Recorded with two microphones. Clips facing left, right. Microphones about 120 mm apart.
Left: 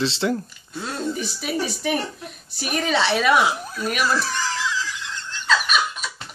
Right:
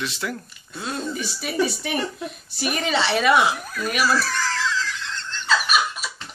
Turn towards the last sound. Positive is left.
turn(degrees=-5)  # may be behind; listen again after turning